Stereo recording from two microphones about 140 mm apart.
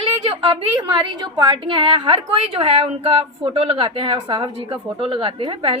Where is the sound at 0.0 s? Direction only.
40° right (ahead or behind).